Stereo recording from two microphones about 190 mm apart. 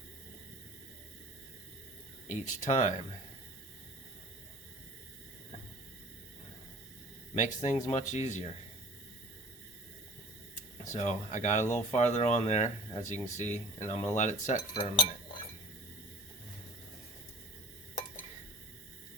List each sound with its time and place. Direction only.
2.3 s speech: 40° left (ahead or behind)
7.3 s speech: 40° left (ahead or behind)
10.9 s speech: 40° left (ahead or behind)